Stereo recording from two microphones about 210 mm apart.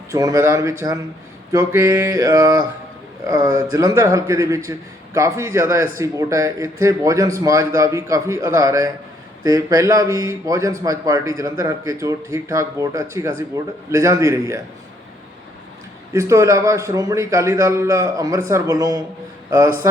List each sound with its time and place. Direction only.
0.1 s a man's voice: 15° right (ahead or behind)
16.1 s a man's voice: 15° right (ahead or behind)